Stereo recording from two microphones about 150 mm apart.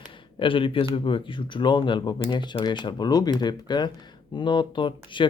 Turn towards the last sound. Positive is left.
turn(degrees=30)  # may be behind; listen again after turning